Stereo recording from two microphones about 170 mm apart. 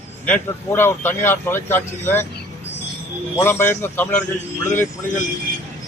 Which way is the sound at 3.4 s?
15° left (ahead or behind).